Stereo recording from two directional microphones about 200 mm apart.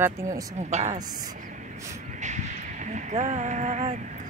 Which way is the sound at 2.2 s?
35° right (ahead or behind).